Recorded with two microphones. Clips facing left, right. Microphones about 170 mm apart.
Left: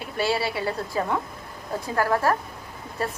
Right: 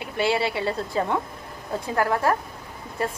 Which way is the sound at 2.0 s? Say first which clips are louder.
Even; 20° right (ahead or behind).